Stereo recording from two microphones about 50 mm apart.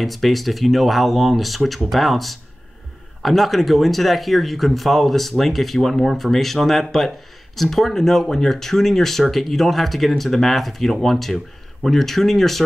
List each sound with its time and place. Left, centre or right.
0.0 s speech: centre